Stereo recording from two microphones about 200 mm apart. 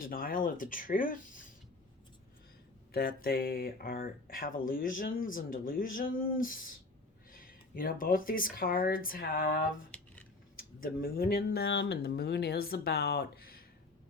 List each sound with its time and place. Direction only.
0.0 s speech: 45° left (ahead or behind)
2.9 s speech: 45° left (ahead or behind)